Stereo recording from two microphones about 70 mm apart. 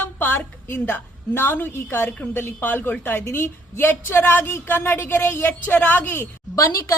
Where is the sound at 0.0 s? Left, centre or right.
Left.